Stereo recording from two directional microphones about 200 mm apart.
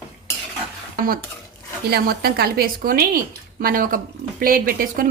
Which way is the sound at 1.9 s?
50° right (ahead or behind).